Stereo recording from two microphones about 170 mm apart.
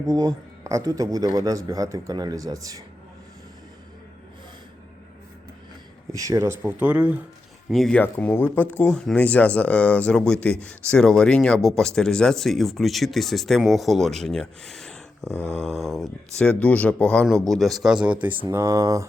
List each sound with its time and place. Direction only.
0.1 s a man's voice: 20° right (ahead or behind)
6.1 s speech: 20° right (ahead or behind)
7.7 s speech: 5° left (ahead or behind)
15.3 s speech: 15° left (ahead or behind)
15.6 s a man's voice: centre (ahead or behind); by 19.0 s 20° right (ahead or behind)